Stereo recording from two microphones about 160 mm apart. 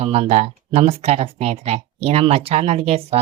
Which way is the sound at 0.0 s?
40° right (ahead or behind).